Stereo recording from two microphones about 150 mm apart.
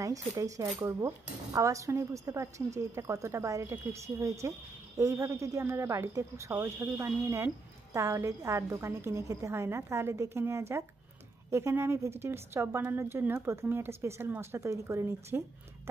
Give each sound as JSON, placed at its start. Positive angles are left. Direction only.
{"t": 0.0, "sound": "speech", "side_deg": -20}